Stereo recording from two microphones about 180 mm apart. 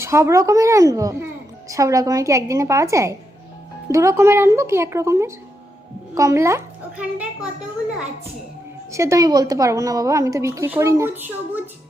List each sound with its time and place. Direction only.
0.0 s a child's voice: 15° right (ahead or behind)
8.9 s a child's voice: 15° right (ahead or behind)